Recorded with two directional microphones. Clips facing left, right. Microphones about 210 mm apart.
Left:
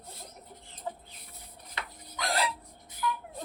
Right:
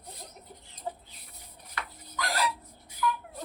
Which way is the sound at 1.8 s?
25° left (ahead or behind).